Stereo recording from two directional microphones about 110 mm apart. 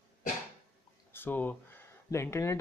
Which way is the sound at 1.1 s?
20° left (ahead or behind).